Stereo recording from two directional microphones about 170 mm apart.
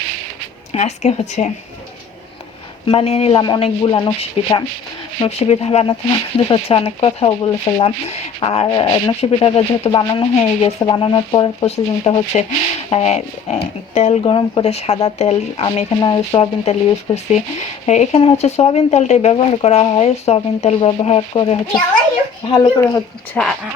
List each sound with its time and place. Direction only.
0.7 s speech: 40° left (ahead or behind)
2.8 s speech: 35° left (ahead or behind)
16.0 s speech: 25° left (ahead or behind)
17.8 s speech: 40° left (ahead or behind); by 22.9 s 25° left (ahead or behind)
23.3 s speech: 5° left (ahead or behind)